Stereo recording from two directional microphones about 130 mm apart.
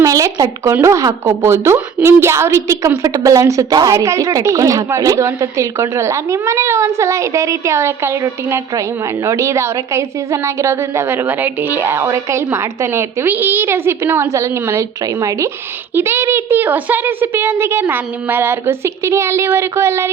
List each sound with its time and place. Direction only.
0.0 s a woman's voice: 25° right (ahead or behind)